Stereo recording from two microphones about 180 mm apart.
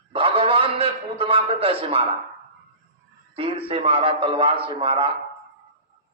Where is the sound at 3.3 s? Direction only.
30° right (ahead or behind).